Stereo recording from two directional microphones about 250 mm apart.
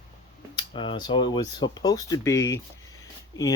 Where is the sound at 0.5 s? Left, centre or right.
Centre.